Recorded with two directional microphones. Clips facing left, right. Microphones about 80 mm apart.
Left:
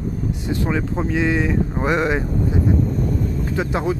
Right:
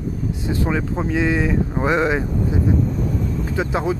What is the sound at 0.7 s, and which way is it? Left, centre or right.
Speech, centre.